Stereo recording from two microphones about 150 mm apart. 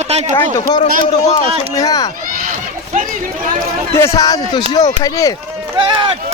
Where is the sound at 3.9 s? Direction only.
20° left (ahead or behind).